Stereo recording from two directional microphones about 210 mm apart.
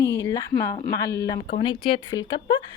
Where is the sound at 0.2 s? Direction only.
15° left (ahead or behind).